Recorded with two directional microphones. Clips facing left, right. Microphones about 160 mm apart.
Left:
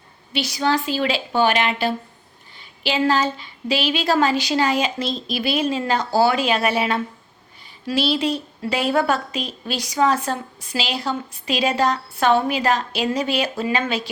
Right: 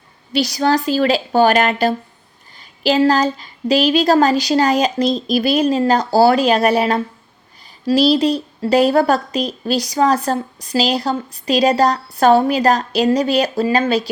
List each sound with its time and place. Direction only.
0.3 s a woman's voice: 40° right (ahead or behind)